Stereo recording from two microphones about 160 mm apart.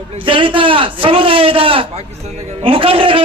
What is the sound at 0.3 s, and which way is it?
A man's voice, 30° right (ahead or behind).